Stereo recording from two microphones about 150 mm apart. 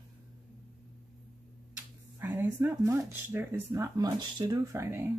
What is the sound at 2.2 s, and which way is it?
Speech, 15° right (ahead or behind).